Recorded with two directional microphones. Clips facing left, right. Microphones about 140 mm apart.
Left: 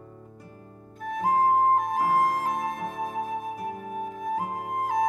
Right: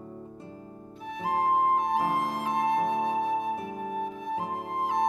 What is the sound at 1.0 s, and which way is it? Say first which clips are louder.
Music: left 5 dB; 45° left (ahead or behind).